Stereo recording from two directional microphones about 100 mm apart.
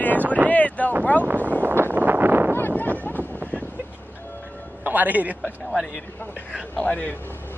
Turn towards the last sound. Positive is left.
turn(degrees=15)  # may be behind; listen again after turning